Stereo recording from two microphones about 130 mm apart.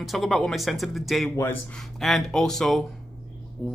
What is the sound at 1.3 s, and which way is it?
Speech, 15° left (ahead or behind).